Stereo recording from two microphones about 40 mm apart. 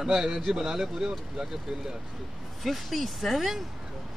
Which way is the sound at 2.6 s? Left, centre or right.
Centre.